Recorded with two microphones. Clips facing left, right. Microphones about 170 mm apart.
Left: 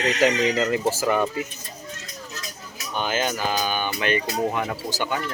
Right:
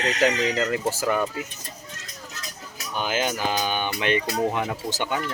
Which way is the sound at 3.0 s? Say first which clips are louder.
Even; 10° right (ahead or behind).